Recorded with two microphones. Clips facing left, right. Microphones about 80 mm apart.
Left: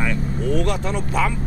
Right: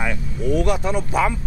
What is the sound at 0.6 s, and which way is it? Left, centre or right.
Speech, centre.